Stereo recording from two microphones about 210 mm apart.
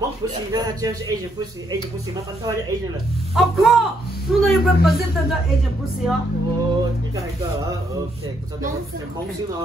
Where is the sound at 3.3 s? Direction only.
Centre (ahead or behind).